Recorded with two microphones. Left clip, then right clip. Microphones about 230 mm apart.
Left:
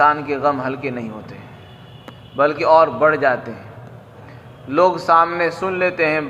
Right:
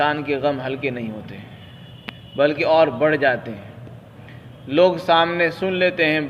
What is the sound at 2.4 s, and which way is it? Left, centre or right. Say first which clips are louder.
A man's voice: left 3 dB; right.